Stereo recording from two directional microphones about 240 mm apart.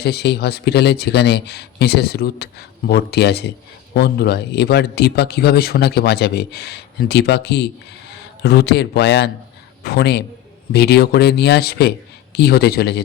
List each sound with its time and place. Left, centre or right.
0.0 s a man's voice: left